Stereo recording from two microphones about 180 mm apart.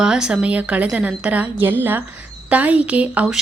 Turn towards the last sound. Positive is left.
turn(degrees=-5)  # may be behind; listen again after turning